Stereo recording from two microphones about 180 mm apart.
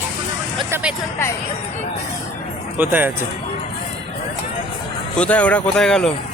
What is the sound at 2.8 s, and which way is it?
Speech, 10° right (ahead or behind).